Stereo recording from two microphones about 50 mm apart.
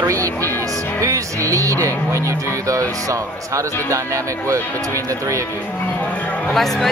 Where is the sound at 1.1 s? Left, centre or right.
Right.